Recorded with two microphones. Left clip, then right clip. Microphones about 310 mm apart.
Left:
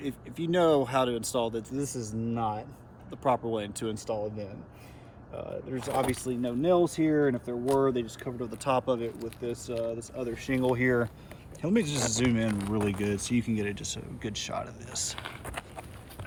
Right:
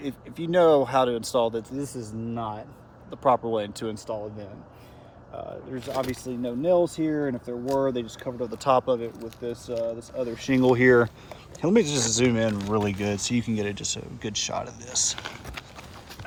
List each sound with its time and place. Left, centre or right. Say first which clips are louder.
0.0 s speech: right 2 dB; centre
10.0 s speech: right 5 dB; centre
11.6 s speech: right 7 dB; centre